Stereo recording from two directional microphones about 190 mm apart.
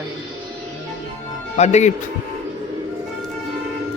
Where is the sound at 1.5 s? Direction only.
35° left (ahead or behind).